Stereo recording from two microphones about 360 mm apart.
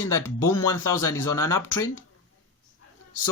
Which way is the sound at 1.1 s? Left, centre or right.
Left.